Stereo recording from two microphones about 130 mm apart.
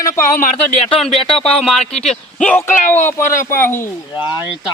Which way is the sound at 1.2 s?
45° left (ahead or behind).